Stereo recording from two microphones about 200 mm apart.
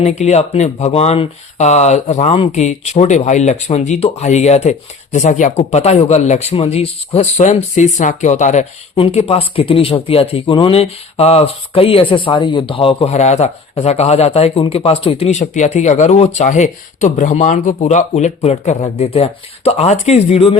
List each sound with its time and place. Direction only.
0.0 s speech: 35° left (ahead or behind)